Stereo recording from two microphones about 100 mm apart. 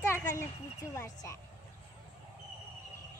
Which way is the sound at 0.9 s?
35° left (ahead or behind).